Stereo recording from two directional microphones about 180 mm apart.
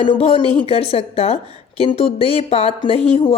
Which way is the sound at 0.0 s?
30° left (ahead or behind).